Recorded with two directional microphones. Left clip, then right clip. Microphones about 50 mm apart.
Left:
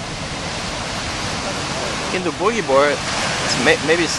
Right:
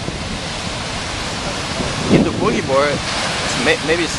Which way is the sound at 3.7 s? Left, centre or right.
Left.